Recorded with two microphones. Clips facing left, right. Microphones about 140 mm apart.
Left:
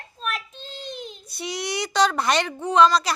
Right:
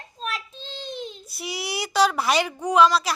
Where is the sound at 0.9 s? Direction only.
5° right (ahead or behind).